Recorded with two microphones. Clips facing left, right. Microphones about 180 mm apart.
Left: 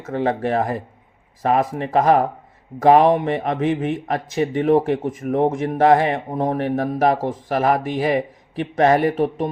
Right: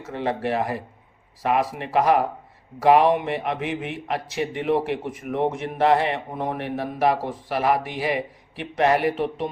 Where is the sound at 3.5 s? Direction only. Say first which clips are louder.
Left 7 dB; 45° left (ahead or behind).